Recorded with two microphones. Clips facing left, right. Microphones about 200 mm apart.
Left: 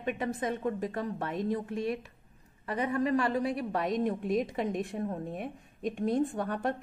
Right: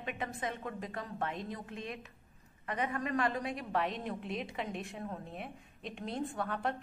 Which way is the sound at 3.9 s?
45° left (ahead or behind).